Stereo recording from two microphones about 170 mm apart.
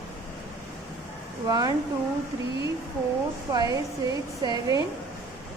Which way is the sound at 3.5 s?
20° right (ahead or behind).